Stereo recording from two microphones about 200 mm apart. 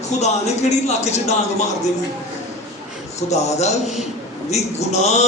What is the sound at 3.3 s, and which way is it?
A man's voice, 35° left (ahead or behind).